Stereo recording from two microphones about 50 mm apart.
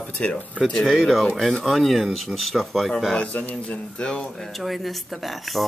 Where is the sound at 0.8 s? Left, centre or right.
Centre.